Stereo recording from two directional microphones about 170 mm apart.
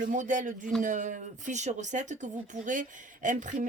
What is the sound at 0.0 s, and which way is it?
Speech, 50° right (ahead or behind).